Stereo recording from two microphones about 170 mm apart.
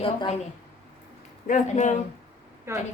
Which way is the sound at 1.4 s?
50° left (ahead or behind).